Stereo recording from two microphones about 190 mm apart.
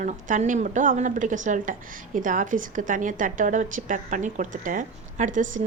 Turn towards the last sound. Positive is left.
turn(degrees=-40)  # may be behind; listen again after turning